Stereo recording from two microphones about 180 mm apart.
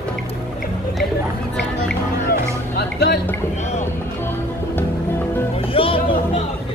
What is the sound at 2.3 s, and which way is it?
Music, 65° left (ahead or behind).